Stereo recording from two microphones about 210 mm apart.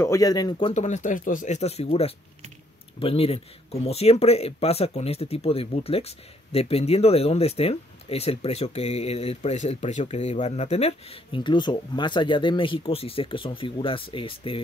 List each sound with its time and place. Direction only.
0.0 s speech: 15° left (ahead or behind)